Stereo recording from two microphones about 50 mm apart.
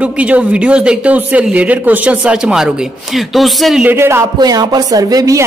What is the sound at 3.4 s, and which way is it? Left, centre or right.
Speech, centre.